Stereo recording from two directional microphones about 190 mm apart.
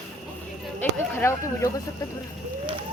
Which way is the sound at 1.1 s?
15° left (ahead or behind).